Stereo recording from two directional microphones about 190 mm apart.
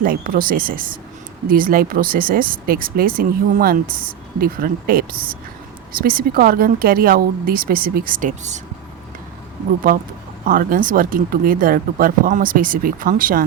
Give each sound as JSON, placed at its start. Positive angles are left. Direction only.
{"t": 0.0, "sound": "speech", "side_deg": -50}
{"t": 10.4, "sound": "speech", "side_deg": -45}